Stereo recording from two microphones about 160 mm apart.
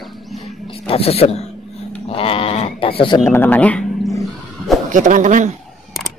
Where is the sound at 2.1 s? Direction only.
35° left (ahead or behind).